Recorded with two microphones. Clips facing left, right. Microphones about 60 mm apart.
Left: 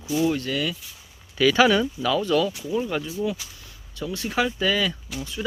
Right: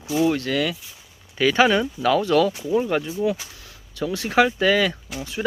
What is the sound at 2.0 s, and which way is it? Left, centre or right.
Speech, right.